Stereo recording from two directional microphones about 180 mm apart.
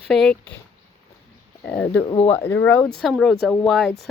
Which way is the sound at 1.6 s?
10° left (ahead or behind).